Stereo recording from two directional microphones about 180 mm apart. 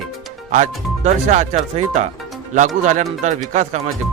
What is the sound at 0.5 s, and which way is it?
Speech, 40° right (ahead or behind).